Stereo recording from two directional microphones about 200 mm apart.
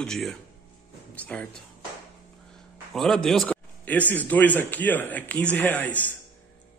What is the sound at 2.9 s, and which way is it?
A man's voice, centre (ahead or behind).